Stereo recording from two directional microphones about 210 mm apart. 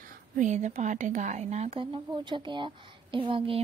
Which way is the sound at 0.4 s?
35° right (ahead or behind).